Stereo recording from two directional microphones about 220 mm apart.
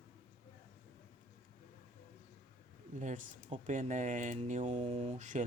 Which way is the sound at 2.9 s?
35° right (ahead or behind).